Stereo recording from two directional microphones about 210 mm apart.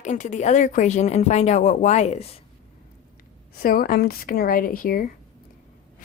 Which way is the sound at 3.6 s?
45° left (ahead or behind).